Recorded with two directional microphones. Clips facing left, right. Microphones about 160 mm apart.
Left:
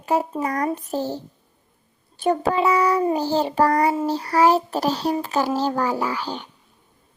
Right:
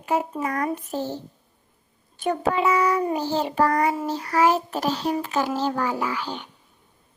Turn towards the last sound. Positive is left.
turn(degrees=35)  # may be behind; listen again after turning